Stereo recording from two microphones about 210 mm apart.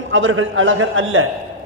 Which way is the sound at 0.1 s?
70° right (ahead or behind).